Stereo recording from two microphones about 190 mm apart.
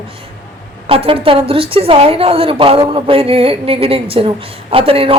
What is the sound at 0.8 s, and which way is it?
A woman's voice, 30° right (ahead or behind).